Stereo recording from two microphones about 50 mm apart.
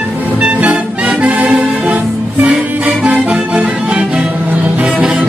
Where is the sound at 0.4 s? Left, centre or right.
Right.